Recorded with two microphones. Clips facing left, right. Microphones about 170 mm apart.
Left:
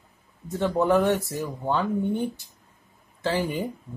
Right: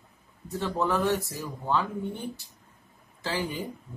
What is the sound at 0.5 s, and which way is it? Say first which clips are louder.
Speech: left 6 dB; 55° left (ahead or behind).